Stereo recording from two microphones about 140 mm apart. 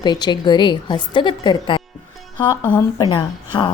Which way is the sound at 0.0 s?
30° left (ahead or behind).